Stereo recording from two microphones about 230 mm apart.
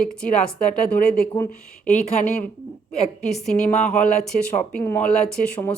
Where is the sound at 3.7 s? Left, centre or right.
Left.